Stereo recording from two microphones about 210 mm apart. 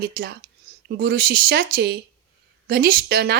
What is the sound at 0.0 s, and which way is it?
Speech, 45° right (ahead or behind).